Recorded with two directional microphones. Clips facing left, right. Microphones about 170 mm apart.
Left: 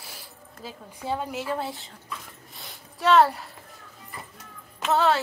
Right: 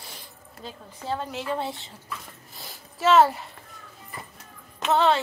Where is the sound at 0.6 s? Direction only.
10° left (ahead or behind).